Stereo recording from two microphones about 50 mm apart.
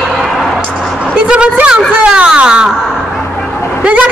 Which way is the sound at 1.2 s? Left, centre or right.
Right.